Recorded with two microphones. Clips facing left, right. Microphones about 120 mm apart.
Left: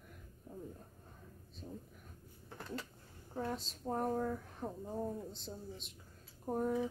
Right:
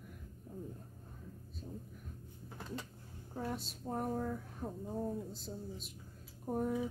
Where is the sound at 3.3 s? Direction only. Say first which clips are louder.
Left 1 dB; 5° right (ahead or behind).